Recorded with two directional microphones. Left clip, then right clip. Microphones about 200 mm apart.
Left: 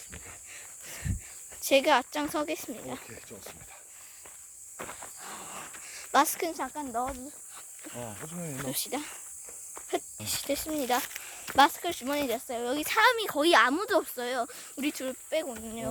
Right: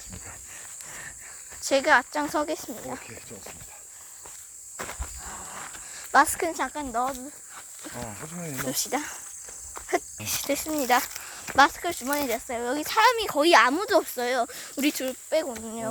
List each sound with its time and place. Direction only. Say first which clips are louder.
0.9 s a sound: right 1 dB; 25° left (ahead or behind)
1.6 s speech: right 3 dB; 15° left (ahead or behind)
2.3 s speech: right 4 dB; 5° right (ahead or behind)
4.8 s wild animals: right 5 dB; 45° right (ahead or behind)
5.2 s a sound: right 1 dB; 25° left (ahead or behind)
5.9 s cricket: right 5 dB; 10° left (ahead or behind)
6.3 s speech: right 4 dB; 5° right (ahead or behind)
6.6 s speech: right 5 dB; 35° right (ahead or behind)
7.9 s speech: right 3 dB; 5° right (ahead or behind)
10.4 s speech: right 4 dB; 10° right (ahead or behind)
11.3 s speech: right 2 dB; 5° left (ahead or behind); by 15.0 s 20° right (ahead or behind)
15.0 s speech: right 5 dB; 10° right (ahead or behind)